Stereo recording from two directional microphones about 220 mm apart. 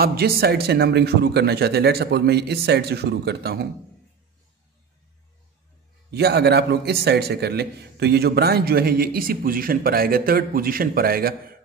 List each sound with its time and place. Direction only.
0.0 s a man's voice: 45° right (ahead or behind)
6.1 s a man's voice: 50° right (ahead or behind)